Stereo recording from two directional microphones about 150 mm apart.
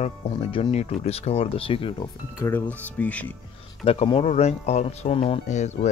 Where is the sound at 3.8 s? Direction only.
40° left (ahead or behind).